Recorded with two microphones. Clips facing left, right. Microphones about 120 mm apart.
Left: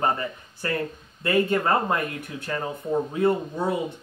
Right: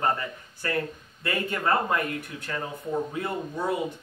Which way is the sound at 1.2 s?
25° left (ahead or behind).